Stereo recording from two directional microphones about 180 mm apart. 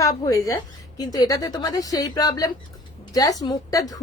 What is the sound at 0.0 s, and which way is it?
Speech, 20° left (ahead or behind).